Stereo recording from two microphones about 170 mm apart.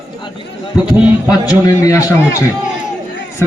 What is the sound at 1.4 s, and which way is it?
Speech, 20° left (ahead or behind).